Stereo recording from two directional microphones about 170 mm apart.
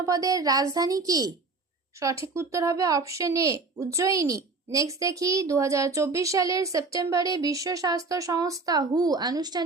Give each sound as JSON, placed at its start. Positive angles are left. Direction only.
{"t": 0.0, "sound": "speech", "side_deg": -20}